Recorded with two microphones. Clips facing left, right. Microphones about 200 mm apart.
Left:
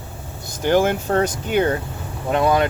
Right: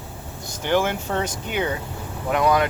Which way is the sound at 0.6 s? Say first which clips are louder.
Left 5 dB; 40° left (ahead or behind).